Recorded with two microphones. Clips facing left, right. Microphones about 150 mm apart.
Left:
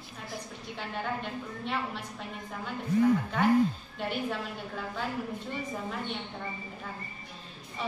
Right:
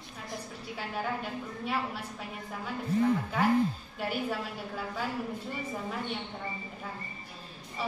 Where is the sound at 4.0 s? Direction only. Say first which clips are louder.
Even; 5° right (ahead or behind).